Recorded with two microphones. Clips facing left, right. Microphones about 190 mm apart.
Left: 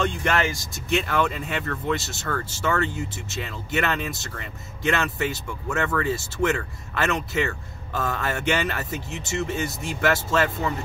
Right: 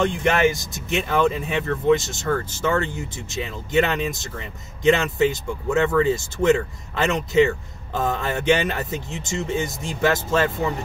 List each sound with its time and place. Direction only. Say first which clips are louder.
0.0 s speech: right 5 dB; 20° right (ahead or behind)